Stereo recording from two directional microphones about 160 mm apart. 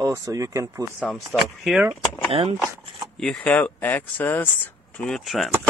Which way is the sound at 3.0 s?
5° left (ahead or behind).